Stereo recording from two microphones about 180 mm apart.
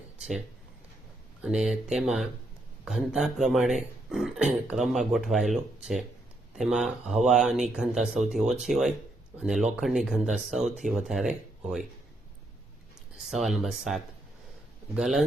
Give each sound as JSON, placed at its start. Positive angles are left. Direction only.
{"t": 1.4, "sound": "speech", "side_deg": -5}
{"t": 13.3, "sound": "speech", "side_deg": 0}